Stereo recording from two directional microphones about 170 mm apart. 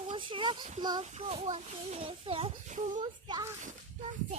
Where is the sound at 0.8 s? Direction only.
25° right (ahead or behind).